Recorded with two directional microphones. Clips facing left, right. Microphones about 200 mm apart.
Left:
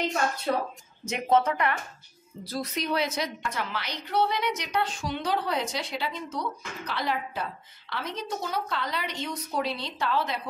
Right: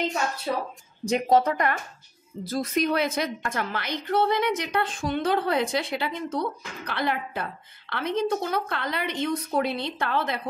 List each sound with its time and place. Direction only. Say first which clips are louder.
0.5 s speech: left 1 dB; 10° right (ahead or behind)
1.0 s a woman's voice: right 3 dB; 35° right (ahead or behind); by 10.4 s 55° right (ahead or behind)